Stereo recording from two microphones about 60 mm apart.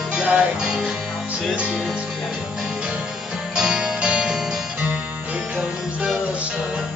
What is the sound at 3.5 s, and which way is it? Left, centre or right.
Music, centre.